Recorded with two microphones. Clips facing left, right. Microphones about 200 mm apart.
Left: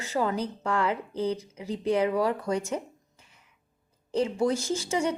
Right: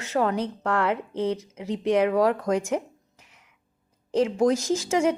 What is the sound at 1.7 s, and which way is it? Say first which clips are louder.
A woman's voice: right 3 dB; 90° right.